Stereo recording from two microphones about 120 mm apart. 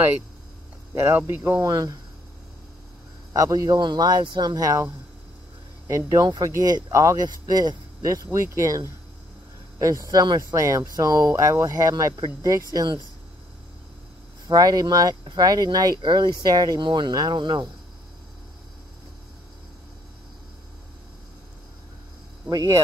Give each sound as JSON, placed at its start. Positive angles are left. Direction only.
{"t": 0.9, "sound": "speech", "side_deg": -20}
{"t": 3.3, "sound": "speech", "side_deg": -30}
{"t": 5.9, "sound": "speech", "side_deg": -30}
{"t": 14.5, "sound": "speech", "side_deg": -35}
{"t": 22.5, "sound": "speech", "side_deg": -30}